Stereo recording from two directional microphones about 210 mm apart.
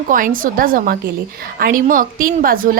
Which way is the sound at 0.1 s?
40° right (ahead or behind).